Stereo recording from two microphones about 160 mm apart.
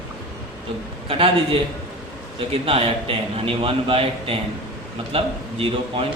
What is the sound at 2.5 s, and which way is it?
A man's voice, 35° right (ahead or behind).